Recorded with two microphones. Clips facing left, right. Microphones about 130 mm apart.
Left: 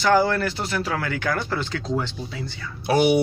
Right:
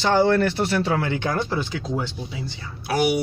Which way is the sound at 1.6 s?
15° right (ahead or behind).